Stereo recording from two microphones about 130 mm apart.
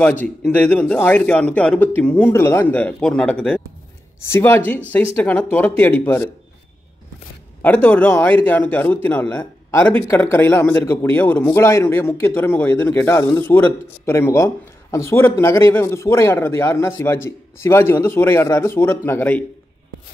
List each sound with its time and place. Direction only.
0.0 s speech: 10° left (ahead or behind)
7.6 s speech: 10° left (ahead or behind)